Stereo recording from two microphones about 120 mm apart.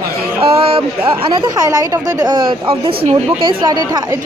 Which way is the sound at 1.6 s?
30° right (ahead or behind).